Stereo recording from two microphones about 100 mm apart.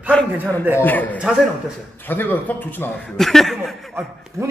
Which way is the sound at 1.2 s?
5° right (ahead or behind).